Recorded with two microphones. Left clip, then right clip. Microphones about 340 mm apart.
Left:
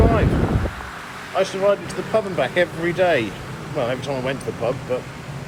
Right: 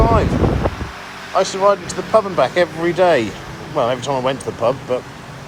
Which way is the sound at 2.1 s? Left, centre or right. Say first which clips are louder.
Right 6 dB; centre.